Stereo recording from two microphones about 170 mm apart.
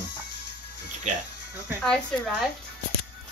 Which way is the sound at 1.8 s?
5° left (ahead or behind).